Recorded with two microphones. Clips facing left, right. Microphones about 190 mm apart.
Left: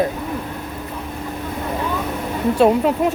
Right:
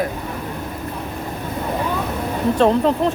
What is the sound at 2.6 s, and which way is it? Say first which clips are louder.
Speech: left 1 dB; 10° left (ahead or behind).